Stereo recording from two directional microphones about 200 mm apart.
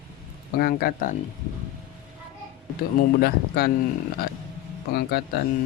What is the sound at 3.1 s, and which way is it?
Speech, 50° left (ahead or behind).